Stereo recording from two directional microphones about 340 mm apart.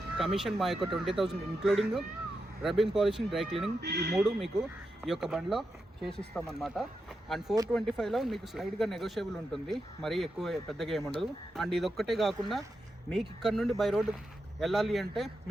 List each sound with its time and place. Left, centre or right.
0.2 s speech: centre
3.8 s speech: right
4.1 s speech: centre